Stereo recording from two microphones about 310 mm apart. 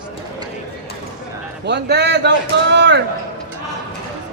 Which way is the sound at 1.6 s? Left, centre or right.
Right.